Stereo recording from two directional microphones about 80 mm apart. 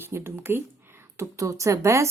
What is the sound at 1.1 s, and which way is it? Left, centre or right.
Speech, right.